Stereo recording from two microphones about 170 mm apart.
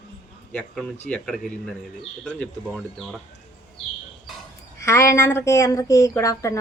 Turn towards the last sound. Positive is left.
turn(degrees=20)  # may be behind; listen again after turning